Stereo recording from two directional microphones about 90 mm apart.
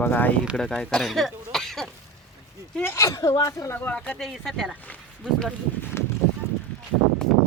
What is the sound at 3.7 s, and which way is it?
Speech, 20° left (ahead or behind).